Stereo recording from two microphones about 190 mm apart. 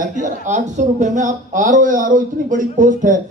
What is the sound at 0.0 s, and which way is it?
A man's voice, 40° right (ahead or behind).